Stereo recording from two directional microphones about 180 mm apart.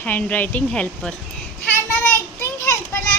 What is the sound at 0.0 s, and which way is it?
A woman's voice, 10° left (ahead or behind).